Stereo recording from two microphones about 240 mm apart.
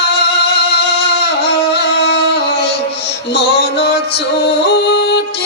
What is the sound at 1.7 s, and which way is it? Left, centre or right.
Music, left.